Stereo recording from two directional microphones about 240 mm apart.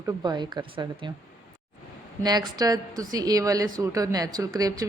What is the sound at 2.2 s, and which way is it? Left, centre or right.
Speech, centre.